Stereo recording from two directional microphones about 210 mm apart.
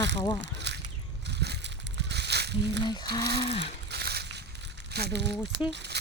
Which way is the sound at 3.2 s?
55° right (ahead or behind).